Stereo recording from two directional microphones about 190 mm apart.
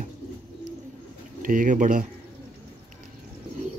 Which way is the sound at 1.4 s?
45° right (ahead or behind).